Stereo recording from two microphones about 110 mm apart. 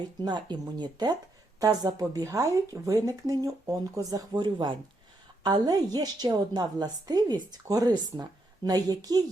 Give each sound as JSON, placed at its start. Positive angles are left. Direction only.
{"t": 0.2, "sound": "a woman's voice", "side_deg": -45}